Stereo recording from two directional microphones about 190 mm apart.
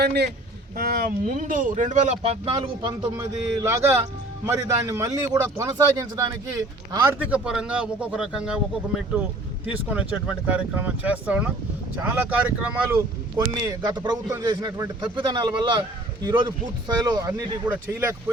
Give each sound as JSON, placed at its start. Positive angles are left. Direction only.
{"t": 0.0, "sound": "a man's voice", "side_deg": -60}
{"t": 9.6, "sound": "a man's voice", "side_deg": -5}
{"t": 13.3, "sound": "a man's voice", "side_deg": -20}